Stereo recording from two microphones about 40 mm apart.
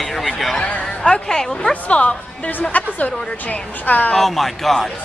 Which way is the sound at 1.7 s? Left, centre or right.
Left.